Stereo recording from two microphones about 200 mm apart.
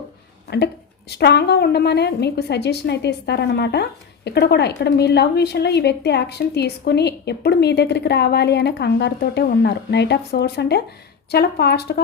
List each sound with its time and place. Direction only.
0.5 s a woman's voice: 55° left (ahead or behind)